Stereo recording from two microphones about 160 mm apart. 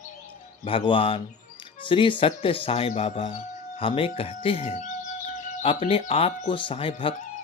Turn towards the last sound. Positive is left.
turn(degrees=35)  # may be behind; listen again after turning